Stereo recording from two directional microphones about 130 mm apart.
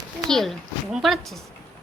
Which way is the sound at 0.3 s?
Centre (ahead or behind).